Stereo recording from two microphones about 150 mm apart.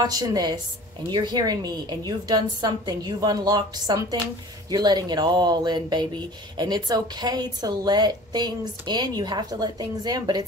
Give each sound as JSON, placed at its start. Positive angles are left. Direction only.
{"t": 0.0, "sound": "a woman's voice", "side_deg": -25}